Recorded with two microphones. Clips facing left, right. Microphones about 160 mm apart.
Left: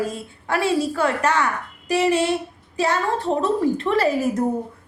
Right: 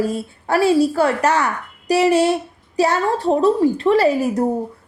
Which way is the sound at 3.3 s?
35° right (ahead or behind).